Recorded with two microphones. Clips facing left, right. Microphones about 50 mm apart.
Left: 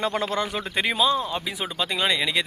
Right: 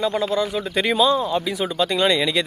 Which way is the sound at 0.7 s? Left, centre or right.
Centre.